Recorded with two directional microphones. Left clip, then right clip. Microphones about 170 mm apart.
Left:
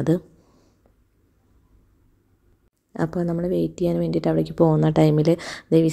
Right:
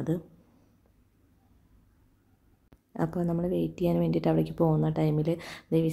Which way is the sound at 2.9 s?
20° left (ahead or behind).